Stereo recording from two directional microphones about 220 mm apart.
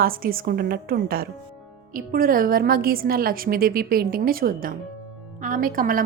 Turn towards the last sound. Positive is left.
turn(degrees=-40)  # may be behind; listen again after turning